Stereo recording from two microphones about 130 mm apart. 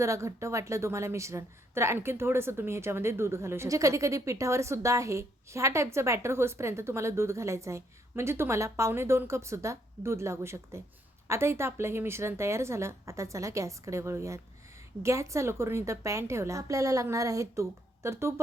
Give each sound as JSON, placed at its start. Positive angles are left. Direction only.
{"t": 0.0, "sound": "a woman's voice", "side_deg": -25}